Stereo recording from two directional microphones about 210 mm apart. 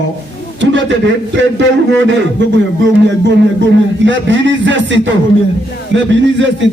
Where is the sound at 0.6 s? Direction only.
60° right (ahead or behind).